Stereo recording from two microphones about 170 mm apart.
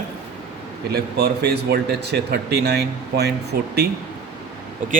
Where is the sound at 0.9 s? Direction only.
70° right (ahead or behind).